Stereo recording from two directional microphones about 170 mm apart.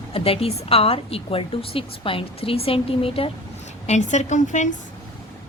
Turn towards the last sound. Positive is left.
turn(degrees=45)  # may be behind; listen again after turning